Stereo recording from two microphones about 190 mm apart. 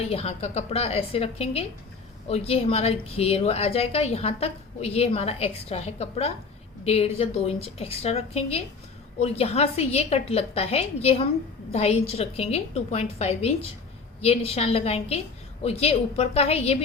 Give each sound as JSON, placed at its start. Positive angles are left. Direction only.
{"t": 0.0, "sound": "a woman's voice", "side_deg": 30}